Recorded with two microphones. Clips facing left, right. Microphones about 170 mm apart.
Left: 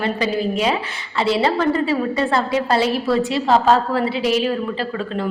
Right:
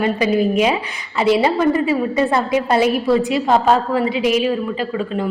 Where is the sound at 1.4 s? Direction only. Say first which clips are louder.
Right 2 dB; 15° right (ahead or behind).